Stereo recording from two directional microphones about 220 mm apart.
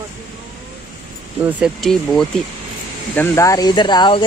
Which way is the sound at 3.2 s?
15° left (ahead or behind).